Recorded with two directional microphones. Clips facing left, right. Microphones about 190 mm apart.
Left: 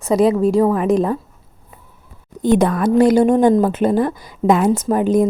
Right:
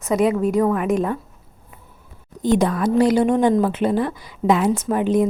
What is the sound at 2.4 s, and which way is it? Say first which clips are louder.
A woman's voice: left 3 dB; 55° left (ahead or behind).